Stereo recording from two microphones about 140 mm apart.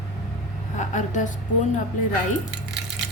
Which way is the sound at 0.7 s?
60° left (ahead or behind).